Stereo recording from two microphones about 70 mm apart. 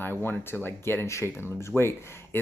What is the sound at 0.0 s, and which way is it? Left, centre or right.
Speech, left.